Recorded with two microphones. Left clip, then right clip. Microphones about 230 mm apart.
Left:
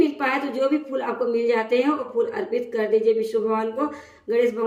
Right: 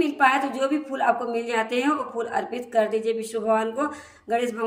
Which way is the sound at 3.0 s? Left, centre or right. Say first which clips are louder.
Left 6 dB; centre.